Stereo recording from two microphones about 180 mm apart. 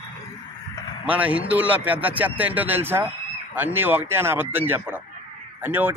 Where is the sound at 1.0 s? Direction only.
10° right (ahead or behind).